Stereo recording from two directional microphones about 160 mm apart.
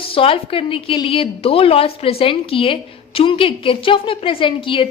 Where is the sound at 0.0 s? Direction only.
35° left (ahead or behind).